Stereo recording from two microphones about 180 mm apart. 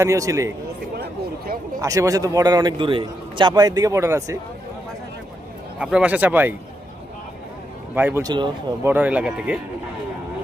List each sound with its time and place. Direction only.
0.0 s speech: 15° right (ahead or behind)
0.9 s speech: 60° right (ahead or behind)
1.8 s a man's voice: 20° right (ahead or behind)
5.8 s speech: 5° right (ahead or behind)
7.9 s speech: 10° right (ahead or behind)
8.9 s speech: 10° right (ahead or behind)